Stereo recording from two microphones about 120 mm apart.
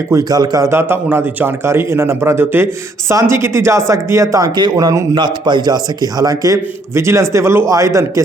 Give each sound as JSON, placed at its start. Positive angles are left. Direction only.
{"t": 0.1, "sound": "speech", "side_deg": -30}